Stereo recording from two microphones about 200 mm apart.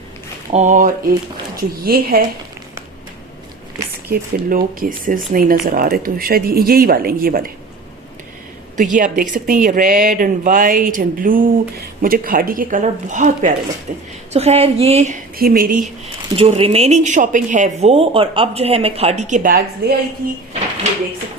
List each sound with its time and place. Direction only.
0.5 s speech: 40° right (ahead or behind)
4.1 s speech: 45° right (ahead or behind)
8.7 s a woman's voice: 40° right (ahead or behind)
16.4 s speech: 30° right (ahead or behind); by 20.4 s 45° right (ahead or behind)